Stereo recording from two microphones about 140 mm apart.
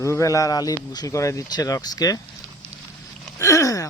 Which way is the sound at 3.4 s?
20° left (ahead or behind).